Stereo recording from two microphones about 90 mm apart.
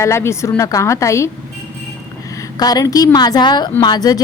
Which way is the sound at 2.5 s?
45° left (ahead or behind).